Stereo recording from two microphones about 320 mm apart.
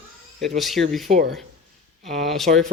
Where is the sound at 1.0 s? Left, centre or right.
Right.